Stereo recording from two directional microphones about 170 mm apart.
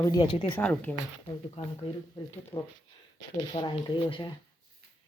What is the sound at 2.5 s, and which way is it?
A woman's voice, 20° left (ahead or behind).